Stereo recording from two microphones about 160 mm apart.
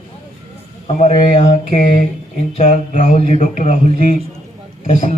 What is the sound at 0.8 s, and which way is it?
Speech, 40° left (ahead or behind).